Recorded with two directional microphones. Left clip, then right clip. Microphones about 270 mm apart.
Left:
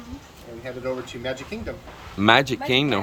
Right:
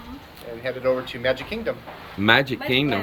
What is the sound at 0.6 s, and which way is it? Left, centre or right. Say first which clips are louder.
Speech: right 6 dB; centre.